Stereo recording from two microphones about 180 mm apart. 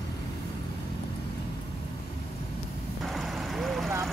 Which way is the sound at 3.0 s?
Centre (ahead or behind).